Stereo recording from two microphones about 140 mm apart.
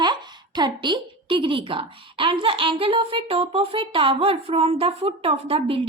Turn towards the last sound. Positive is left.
turn(degrees=-40)  # may be behind; listen again after turning